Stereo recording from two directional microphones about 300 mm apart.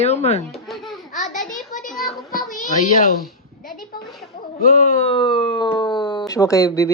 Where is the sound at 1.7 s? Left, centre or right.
Centre.